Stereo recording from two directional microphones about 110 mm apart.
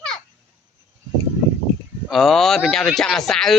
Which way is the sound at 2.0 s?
Centre (ahead or behind).